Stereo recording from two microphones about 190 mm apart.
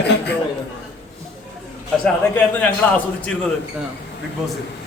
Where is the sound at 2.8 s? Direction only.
10° left (ahead or behind).